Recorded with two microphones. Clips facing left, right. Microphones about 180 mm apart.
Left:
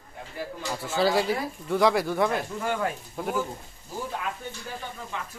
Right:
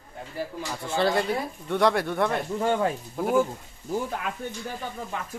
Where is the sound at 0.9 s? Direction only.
Centre (ahead or behind).